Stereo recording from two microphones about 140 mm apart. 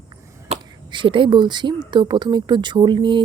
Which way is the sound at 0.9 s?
35° right (ahead or behind).